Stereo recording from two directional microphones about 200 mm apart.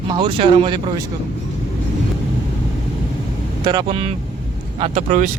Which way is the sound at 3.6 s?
25° right (ahead or behind).